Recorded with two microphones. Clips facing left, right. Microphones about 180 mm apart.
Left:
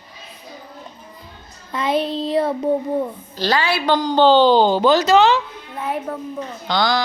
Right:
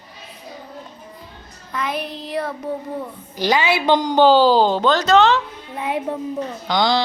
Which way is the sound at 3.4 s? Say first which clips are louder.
Right 1 dB; 20° right (ahead or behind).